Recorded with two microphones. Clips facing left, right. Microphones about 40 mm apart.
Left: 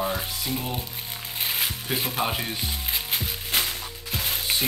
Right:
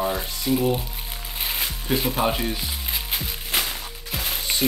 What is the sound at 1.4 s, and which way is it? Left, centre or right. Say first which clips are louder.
Music: even; centre.